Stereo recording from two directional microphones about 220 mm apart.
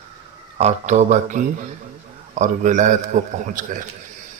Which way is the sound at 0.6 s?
30° right (ahead or behind).